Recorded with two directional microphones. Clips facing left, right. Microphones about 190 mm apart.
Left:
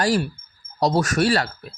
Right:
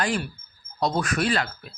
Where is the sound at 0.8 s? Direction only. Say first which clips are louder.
Left 5 dB; 40° left (ahead or behind).